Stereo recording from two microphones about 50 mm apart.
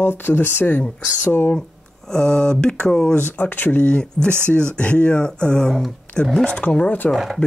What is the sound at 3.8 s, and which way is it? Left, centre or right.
Speech, centre.